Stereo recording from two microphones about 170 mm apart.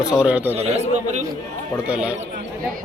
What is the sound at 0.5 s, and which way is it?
Speech, 40° right (ahead or behind).